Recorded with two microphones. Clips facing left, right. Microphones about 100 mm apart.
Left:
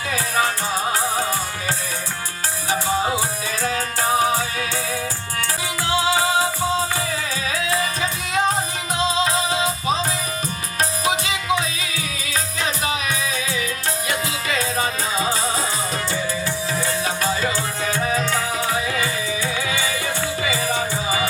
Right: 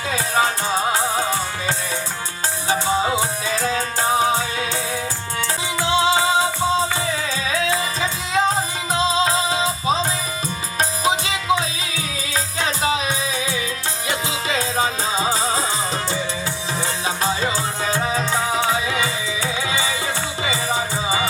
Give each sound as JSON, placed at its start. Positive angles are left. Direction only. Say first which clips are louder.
{"t": 0.1, "sound": "music", "louder": "right 2 dB", "side_deg": -25}
{"t": 2.6, "sound": "music", "louder": "right 1 dB", "side_deg": -25}
{"t": 16.8, "sound": "music", "louder": "right 2 dB", "side_deg": -25}